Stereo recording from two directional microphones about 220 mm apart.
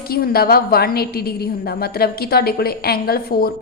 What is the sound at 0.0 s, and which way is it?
A woman's voice, 45° left (ahead or behind).